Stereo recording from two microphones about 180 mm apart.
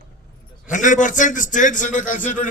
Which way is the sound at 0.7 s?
45° left (ahead or behind).